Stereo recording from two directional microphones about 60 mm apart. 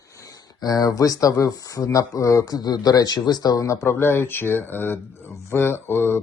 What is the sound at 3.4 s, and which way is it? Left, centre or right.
Speech, left.